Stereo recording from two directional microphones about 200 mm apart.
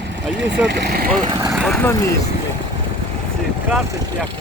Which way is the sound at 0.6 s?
55° right (ahead or behind).